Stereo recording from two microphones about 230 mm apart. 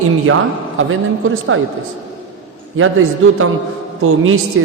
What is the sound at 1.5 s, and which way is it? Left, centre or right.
Speech, right.